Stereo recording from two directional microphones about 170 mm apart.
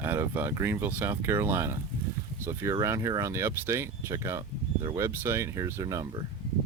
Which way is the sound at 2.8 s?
20° right (ahead or behind).